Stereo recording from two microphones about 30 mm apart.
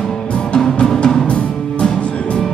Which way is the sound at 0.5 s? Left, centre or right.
Left.